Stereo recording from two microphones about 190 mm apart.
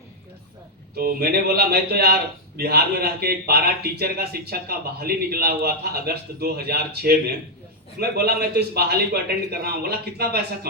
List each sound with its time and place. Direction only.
0.9 s a man's voice: 55° right (ahead or behind)